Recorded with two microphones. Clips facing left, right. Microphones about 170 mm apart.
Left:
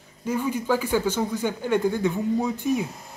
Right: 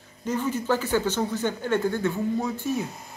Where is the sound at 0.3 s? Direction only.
10° left (ahead or behind).